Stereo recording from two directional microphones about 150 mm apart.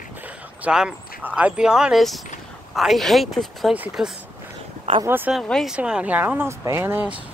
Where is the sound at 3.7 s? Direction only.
10° right (ahead or behind).